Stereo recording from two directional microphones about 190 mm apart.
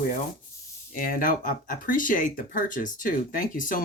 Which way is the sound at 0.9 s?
45° left (ahead or behind).